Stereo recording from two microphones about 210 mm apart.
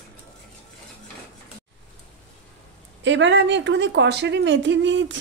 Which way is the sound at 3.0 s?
60° right (ahead or behind).